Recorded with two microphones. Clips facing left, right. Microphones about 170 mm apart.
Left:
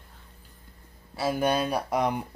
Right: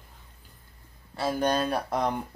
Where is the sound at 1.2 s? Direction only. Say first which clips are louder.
Left 1 dB; 10° left (ahead or behind).